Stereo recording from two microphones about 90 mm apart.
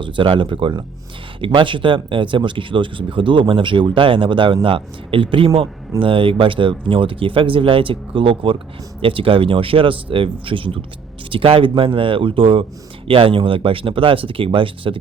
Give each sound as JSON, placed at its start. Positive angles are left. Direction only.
{"t": 0.0, "sound": "speech", "side_deg": -65}
{"t": 11.3, "sound": "speech", "side_deg": -85}